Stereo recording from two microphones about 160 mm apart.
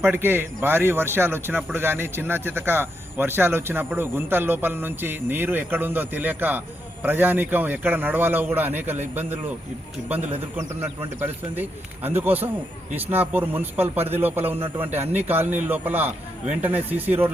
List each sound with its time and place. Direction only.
0.0 s speech: 15° right (ahead or behind)
12.0 s speech: 10° right (ahead or behind)
14.8 s a man's voice: 40° right (ahead or behind)
15.3 s speech: 10° right (ahead or behind)